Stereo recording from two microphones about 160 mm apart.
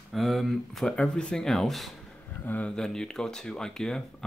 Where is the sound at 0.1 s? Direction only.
Centre (ahead or behind).